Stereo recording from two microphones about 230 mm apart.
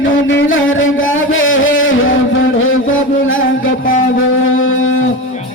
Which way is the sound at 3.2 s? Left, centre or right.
Left.